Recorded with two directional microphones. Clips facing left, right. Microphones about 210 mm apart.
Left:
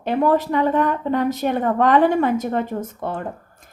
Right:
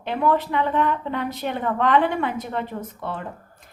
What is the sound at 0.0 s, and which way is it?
A woman's voice, 45° left (ahead or behind).